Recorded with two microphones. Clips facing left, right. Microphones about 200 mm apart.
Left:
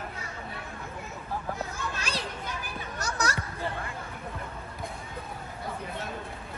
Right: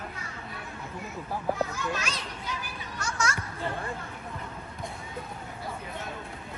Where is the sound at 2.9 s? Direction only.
35° left (ahead or behind).